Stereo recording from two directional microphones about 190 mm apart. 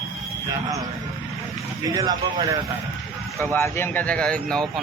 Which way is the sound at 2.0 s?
20° right (ahead or behind).